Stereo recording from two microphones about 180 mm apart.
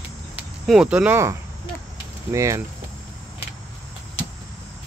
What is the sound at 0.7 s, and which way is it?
Speech, 5° right (ahead or behind).